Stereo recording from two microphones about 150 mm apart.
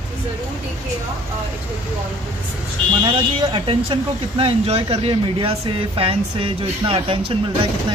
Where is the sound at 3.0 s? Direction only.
35° right (ahead or behind).